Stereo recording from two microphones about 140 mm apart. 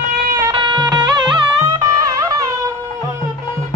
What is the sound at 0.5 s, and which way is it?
Music, 35° right (ahead or behind).